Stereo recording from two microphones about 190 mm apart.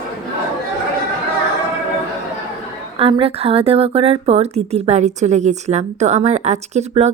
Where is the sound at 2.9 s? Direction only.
30° right (ahead or behind).